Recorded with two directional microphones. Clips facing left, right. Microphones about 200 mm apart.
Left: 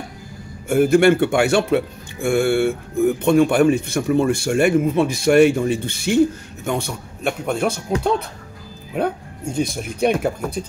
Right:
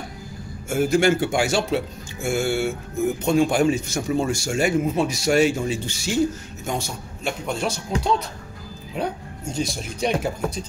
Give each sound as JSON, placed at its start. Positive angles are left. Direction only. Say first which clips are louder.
{"t": 0.7, "sound": "speech", "louder": "left 5 dB", "side_deg": 60}